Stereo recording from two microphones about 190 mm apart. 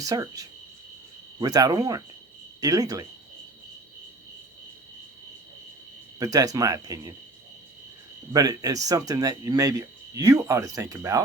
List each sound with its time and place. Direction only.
0.0 s speech: 20° right (ahead or behind)
6.1 s speech: 20° right (ahead or behind)
8.3 s speech: 20° right (ahead or behind)